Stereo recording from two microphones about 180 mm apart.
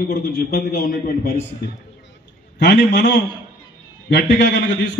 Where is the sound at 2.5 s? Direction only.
85° left.